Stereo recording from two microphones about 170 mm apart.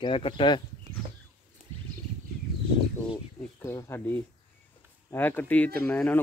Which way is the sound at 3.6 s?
15° left (ahead or behind).